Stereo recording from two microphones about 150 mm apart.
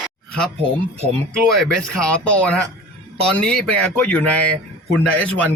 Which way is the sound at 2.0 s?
10° left (ahead or behind).